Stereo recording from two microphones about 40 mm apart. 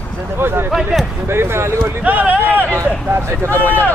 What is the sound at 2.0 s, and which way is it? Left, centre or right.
Speech, right.